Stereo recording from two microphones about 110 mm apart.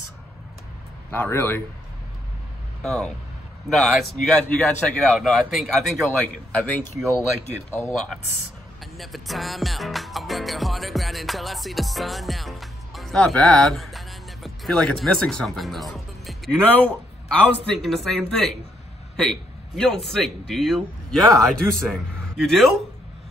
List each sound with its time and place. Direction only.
1.1 s speech: 20° left (ahead or behind)
2.8 s a man's voice: 5° left (ahead or behind)
7.9 s a man's voice: 5° left (ahead or behind)
8.9 s music: centre (ahead or behind)
16.6 s a man's voice: 15° left (ahead or behind)
17.7 s a man's voice: centre (ahead or behind)